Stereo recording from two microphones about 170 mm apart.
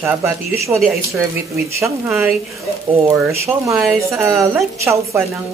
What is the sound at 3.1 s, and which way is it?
Speech, 15° right (ahead or behind).